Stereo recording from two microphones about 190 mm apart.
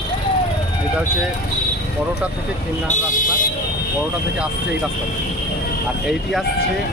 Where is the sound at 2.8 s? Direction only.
40° left (ahead or behind).